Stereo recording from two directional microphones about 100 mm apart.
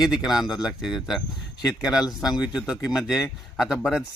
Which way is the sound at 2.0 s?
40° left (ahead or behind).